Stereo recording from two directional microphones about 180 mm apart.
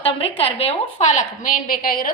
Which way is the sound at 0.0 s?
30° left (ahead or behind).